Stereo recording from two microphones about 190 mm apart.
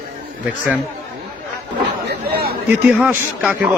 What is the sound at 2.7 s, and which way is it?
Speech, 5° right (ahead or behind).